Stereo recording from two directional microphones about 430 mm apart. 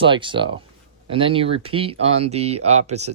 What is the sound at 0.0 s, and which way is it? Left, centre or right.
Speech, centre.